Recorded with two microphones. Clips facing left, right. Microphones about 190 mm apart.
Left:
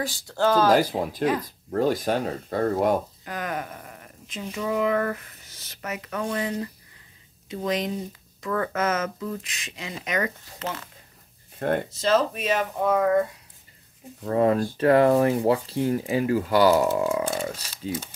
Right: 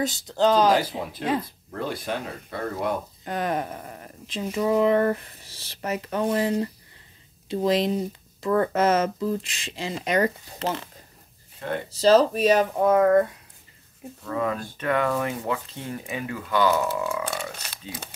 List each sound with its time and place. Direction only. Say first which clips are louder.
0.0 s speech: right 2 dB; 20° right (ahead or behind)
0.7 s speech: left 4 dB; 40° left (ahead or behind)
3.3 s speech: right 4 dB; 30° right (ahead or behind)
11.9 s speech: right 10 dB; 35° right (ahead or behind)
14.3 s speech: left 7 dB; 35° left (ahead or behind)
17.6 s speech: left 7 dB; 65° right (ahead or behind)